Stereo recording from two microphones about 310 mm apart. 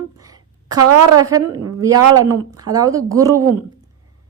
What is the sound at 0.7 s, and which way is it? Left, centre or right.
Speech, right.